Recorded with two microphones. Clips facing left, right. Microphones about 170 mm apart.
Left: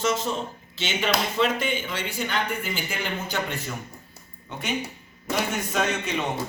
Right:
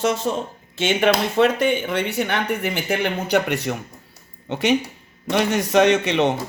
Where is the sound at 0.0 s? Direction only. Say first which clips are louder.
Right 4 dB; 60° right (ahead or behind).